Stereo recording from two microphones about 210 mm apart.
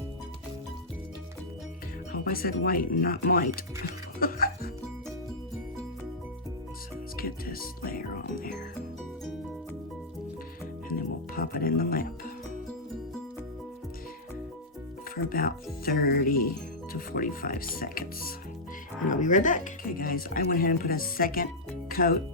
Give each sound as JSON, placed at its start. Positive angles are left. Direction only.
{"t": 2.1, "sound": "speech", "side_deg": 45}
{"t": 4.2, "sound": "music", "side_deg": 45}
{"t": 7.2, "sound": "speech", "side_deg": 45}
{"t": 10.8, "sound": "music", "side_deg": 45}
{"t": 15.1, "sound": "speech", "side_deg": 45}